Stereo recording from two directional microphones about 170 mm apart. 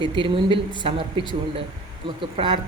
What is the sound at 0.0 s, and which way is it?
Music, 30° right (ahead or behind).